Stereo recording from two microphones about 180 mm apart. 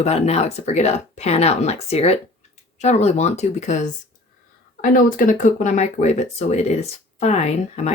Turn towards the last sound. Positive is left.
turn(degrees=40)  # may be behind; listen again after turning